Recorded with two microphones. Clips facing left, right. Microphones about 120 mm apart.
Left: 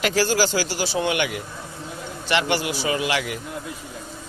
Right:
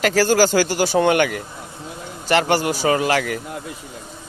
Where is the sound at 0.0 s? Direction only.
45° right (ahead or behind).